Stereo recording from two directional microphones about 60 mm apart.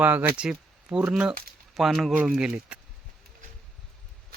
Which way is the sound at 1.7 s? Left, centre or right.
Centre.